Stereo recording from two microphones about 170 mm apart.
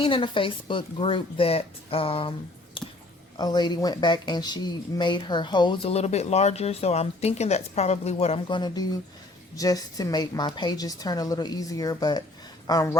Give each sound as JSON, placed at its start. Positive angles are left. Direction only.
{"t": 0.0, "sound": "a woman's voice", "side_deg": 30}
{"t": 2.8, "sound": "a sound", "side_deg": 30}
{"t": 3.3, "sound": "speech", "side_deg": 25}